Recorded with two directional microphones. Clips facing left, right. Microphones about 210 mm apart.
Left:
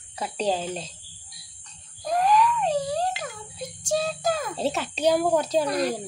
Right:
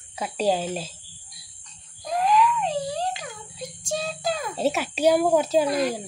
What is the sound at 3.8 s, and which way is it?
Child singing, 45° left (ahead or behind).